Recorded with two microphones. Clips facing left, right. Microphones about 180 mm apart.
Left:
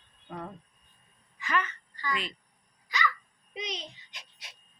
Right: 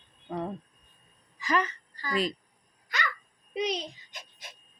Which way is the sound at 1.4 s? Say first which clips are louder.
Right 3 dB; 35° right (ahead or behind).